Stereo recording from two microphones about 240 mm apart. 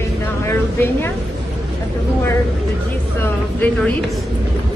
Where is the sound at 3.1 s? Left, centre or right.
Centre.